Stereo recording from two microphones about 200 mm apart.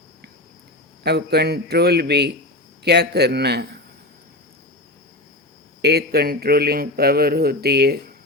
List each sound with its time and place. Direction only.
1.0 s a man's voice: 55° right (ahead or behind)
5.8 s a man's voice: 55° right (ahead or behind)